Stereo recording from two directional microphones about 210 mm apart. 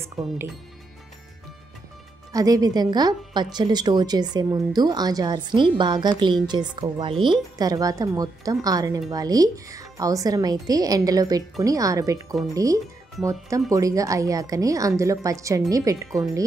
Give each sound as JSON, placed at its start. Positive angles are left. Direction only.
{"t": 2.3, "sound": "speech", "side_deg": -15}